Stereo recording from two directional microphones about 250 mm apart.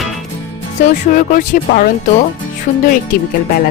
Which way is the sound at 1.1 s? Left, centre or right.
Left.